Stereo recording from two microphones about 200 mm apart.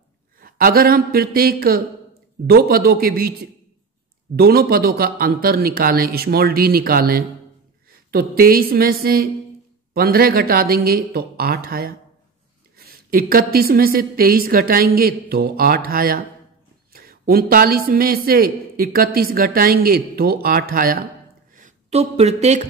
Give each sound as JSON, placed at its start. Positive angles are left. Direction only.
{"t": 0.4, "sound": "a man's voice", "side_deg": -45}
{"t": 4.4, "sound": "a man's voice", "side_deg": -50}
{"t": 21.5, "sound": "speech", "side_deg": -35}